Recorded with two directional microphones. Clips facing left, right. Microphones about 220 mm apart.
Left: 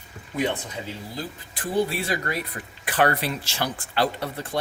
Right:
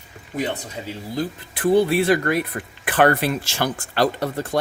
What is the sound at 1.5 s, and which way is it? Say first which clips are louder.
Speech: right 8 dB; 60° right (ahead or behind).